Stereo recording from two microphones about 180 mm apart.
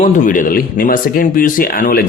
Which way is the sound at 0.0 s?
50° left (ahead or behind).